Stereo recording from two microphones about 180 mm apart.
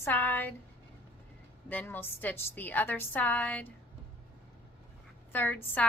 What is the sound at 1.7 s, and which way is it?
A woman's voice, 10° left (ahead or behind).